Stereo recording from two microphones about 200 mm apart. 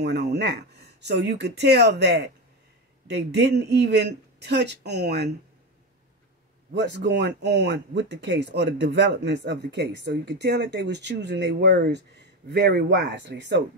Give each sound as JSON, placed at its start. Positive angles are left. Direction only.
{"t": 0.0, "sound": "speech", "side_deg": -55}
{"t": 6.7, "sound": "speech", "side_deg": -60}